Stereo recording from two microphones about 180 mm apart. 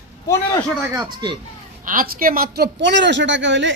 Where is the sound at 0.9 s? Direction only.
25° right (ahead or behind).